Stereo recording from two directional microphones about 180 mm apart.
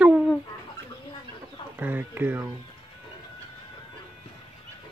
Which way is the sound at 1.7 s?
10° right (ahead or behind).